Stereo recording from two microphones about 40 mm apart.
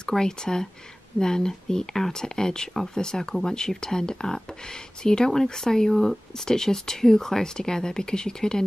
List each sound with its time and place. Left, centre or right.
0.0 s speech: centre